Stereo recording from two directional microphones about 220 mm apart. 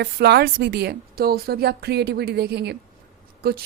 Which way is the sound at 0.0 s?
45° right (ahead or behind).